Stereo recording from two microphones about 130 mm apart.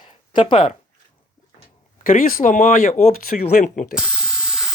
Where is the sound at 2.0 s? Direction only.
90° left.